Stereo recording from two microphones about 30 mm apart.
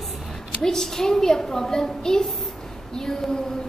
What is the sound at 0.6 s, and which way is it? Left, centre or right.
A woman's voice, centre.